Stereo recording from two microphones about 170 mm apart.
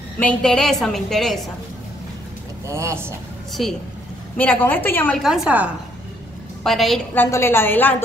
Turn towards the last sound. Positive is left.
turn(degrees=10)  # may be behind; listen again after turning